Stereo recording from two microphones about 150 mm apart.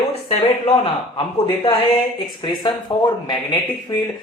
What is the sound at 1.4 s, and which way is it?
A man's voice, 35° left (ahead or behind).